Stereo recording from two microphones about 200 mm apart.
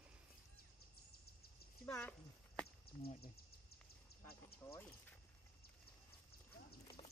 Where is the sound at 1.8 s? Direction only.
10° left (ahead or behind).